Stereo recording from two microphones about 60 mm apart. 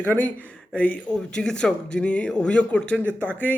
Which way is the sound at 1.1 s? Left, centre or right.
Centre.